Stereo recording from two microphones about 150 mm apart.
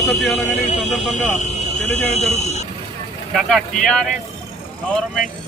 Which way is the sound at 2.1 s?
45° left (ahead or behind).